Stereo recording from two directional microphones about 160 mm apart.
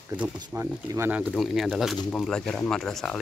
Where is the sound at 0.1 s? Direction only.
10° right (ahead or behind).